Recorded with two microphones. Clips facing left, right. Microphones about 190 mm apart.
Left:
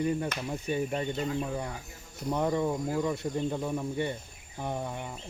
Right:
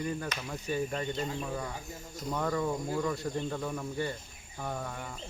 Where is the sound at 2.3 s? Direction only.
20° left (ahead or behind).